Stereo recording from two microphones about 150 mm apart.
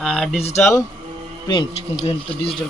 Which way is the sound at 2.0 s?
40° left (ahead or behind).